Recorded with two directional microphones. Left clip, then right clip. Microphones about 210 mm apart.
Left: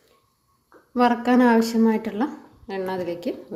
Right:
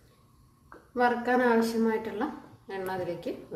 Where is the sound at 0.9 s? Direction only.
40° left (ahead or behind).